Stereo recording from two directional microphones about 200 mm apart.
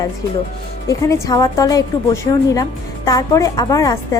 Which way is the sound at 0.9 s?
15° left (ahead or behind).